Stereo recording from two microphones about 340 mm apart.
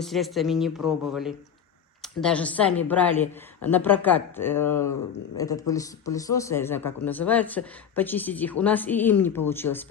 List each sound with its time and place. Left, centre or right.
0.0 s a man's voice: centre
9.7 s a man's voice: left